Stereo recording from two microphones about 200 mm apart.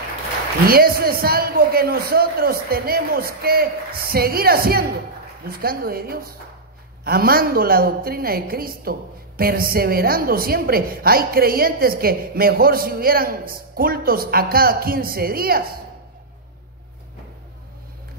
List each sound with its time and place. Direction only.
0.7 s a woman's voice: 50° right (ahead or behind)